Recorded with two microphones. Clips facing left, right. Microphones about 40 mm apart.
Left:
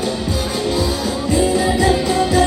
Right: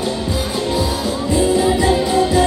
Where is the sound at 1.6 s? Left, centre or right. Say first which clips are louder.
Right 1 dB; centre.